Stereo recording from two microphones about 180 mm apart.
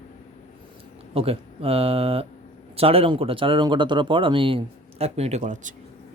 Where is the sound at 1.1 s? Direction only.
35° right (ahead or behind).